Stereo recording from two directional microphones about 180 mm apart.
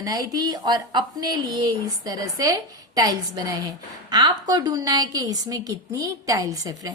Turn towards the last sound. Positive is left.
turn(degrees=-20)  # may be behind; listen again after turning